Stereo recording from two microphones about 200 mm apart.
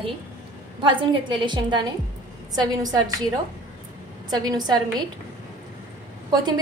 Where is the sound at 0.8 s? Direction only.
25° right (ahead or behind).